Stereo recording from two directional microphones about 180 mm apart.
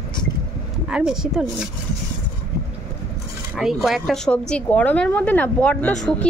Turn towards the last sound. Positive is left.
turn(degrees=5)  # may be behind; listen again after turning